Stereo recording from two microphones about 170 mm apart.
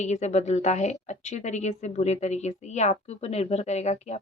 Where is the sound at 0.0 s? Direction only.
40° left (ahead or behind).